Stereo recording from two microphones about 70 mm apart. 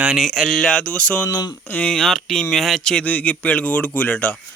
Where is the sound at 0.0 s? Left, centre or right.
Centre.